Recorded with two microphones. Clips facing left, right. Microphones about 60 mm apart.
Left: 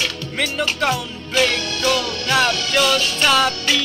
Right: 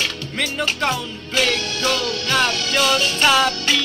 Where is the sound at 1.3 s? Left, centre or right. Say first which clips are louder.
Left 2 dB; centre.